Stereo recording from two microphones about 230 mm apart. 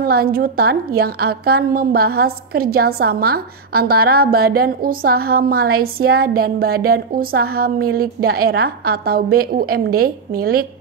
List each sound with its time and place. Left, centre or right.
0.0 s a woman's voice: right